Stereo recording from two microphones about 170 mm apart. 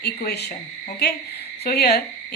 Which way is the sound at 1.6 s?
70° left (ahead or behind).